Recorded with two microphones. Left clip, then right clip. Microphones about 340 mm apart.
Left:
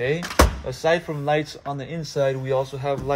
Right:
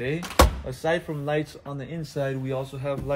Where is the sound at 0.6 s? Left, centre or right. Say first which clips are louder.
Left 5 dB; left.